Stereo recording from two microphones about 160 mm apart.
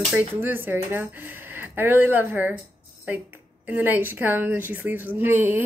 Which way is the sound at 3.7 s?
10° right (ahead or behind).